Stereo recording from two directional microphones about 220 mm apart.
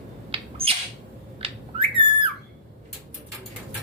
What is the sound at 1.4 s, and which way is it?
Bird, 25° right (ahead or behind).